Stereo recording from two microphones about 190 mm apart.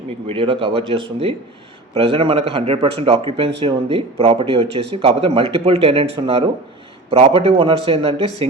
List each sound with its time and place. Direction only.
0.3 s a man's voice: 30° right (ahead or behind)